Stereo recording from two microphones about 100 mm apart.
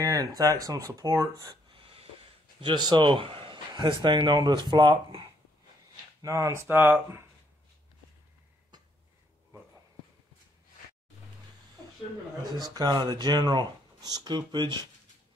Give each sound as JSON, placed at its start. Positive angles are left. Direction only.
{"t": 0.0, "sound": "speech", "side_deg": -35}
{"t": 1.5, "sound": "a sound", "side_deg": -65}
{"t": 2.6, "sound": "a man's voice", "side_deg": -50}
{"t": 6.2, "sound": "speech", "side_deg": -30}
{"t": 12.5, "sound": "a man's voice", "side_deg": -40}